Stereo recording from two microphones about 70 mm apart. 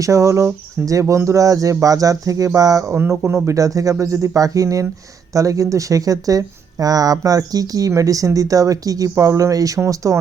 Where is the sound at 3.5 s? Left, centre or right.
Right.